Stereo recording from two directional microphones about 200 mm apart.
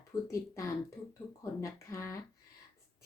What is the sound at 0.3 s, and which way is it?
A woman's voice, 15° left (ahead or behind).